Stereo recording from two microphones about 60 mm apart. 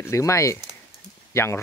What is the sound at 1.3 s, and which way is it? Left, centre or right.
Speech, left.